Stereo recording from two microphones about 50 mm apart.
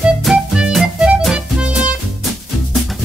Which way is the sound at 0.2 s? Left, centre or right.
Centre.